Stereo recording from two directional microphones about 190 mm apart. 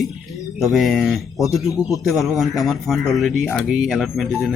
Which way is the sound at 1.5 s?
15° left (ahead or behind).